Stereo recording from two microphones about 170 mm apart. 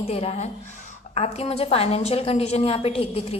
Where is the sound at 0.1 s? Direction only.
40° left (ahead or behind).